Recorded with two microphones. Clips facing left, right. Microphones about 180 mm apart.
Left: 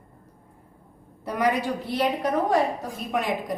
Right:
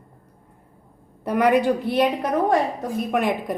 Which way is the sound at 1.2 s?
60° right (ahead or behind).